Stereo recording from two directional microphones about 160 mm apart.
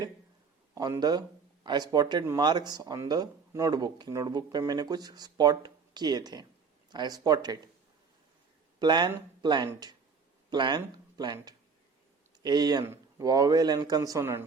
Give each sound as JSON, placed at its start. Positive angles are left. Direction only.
{"t": 0.7, "sound": "a man's voice", "side_deg": -25}
{"t": 8.8, "sound": "speech", "side_deg": -25}
{"t": 12.4, "sound": "speech", "side_deg": -25}